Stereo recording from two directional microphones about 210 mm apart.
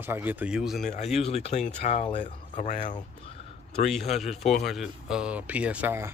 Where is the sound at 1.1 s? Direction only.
30° left (ahead or behind).